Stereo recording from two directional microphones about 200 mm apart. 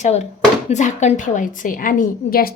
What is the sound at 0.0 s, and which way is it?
A woman's voice, 35° left (ahead or behind).